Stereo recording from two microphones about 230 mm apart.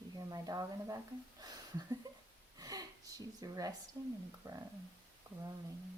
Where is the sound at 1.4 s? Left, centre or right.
Centre.